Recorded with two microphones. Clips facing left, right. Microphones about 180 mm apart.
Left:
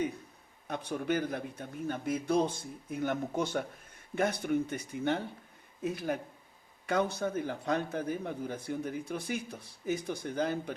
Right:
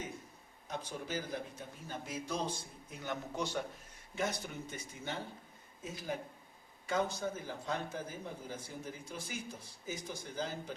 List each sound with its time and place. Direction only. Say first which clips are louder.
0.7 s a man's voice: left 8 dB; 60° left (ahead or behind)